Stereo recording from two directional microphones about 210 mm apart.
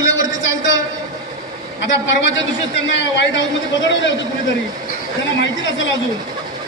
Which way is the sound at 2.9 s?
60° left (ahead or behind).